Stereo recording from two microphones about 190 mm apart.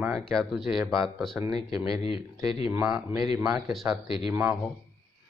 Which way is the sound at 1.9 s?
30° left (ahead or behind).